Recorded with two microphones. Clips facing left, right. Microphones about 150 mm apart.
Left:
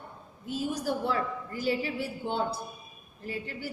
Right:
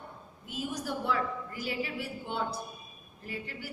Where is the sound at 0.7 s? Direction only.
30° left (ahead or behind).